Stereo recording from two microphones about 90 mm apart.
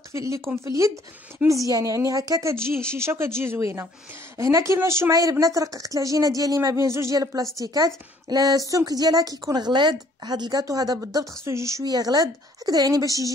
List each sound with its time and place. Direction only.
0.1 s speech: 35° right (ahead or behind)
2.5 s speech: 25° right (ahead or behind)
7.5 s a woman's voice: 45° right (ahead or behind)
9.5 s a woman's voice: 55° right (ahead or behind); by 11.8 s 35° right (ahead or behind)
11.8 s a woman's voice: 50° right (ahead or behind)